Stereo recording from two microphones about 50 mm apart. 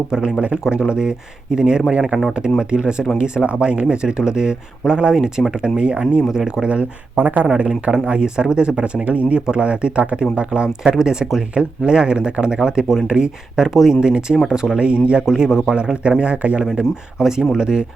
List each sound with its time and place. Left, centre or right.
0.1 s speech: centre
15.4 s speech: centre
15.7 s speech: right
16.7 s speech: centre